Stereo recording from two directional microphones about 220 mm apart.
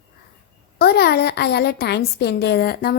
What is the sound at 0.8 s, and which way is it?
A woman's voice, 45° left (ahead or behind).